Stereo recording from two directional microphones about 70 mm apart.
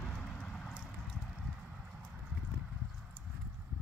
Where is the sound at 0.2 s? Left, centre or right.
Centre.